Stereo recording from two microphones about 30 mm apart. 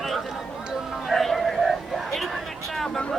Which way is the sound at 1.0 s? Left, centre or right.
Centre.